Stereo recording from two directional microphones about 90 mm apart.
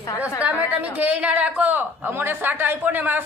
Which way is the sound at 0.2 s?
15° right (ahead or behind).